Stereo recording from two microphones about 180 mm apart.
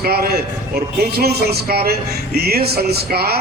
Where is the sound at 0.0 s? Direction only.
55° right (ahead or behind).